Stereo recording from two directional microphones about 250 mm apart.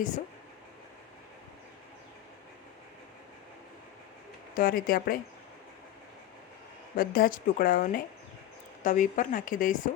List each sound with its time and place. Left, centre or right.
4.5 s speech: left
6.9 s speech: left